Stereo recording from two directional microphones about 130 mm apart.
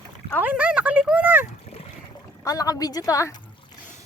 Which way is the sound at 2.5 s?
30° left (ahead or behind).